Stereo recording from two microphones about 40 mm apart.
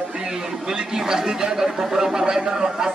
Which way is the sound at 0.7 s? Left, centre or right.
Centre.